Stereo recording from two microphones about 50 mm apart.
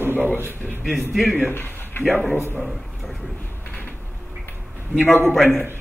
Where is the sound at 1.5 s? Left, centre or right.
Left.